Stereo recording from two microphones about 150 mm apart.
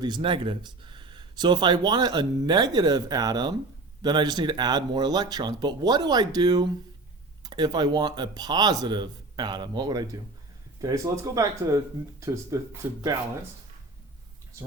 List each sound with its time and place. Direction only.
0.0 s speech: 30° right (ahead or behind)